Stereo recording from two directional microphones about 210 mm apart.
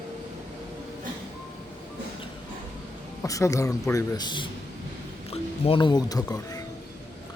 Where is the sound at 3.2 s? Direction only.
15° left (ahead or behind).